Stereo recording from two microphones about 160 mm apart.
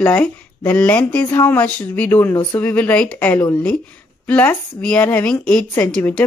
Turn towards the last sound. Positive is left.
turn(degrees=10)  # may be behind; listen again after turning